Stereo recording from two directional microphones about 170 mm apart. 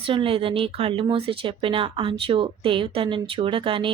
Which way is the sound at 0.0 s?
30° right (ahead or behind).